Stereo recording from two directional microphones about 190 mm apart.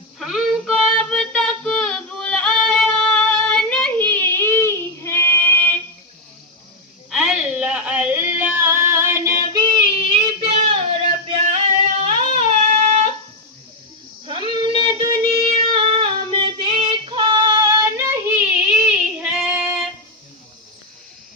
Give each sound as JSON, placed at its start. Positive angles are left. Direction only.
{"t": 0.2, "sound": "child singing", "side_deg": 0}
{"t": 7.1, "sound": "a sound", "side_deg": 0}
{"t": 11.3, "sound": "singing", "side_deg": -35}
{"t": 14.5, "sound": "a sound", "side_deg": -25}
{"t": 15.7, "sound": "female singing", "side_deg": -25}
{"t": 18.4, "sound": "female singing", "side_deg": -5}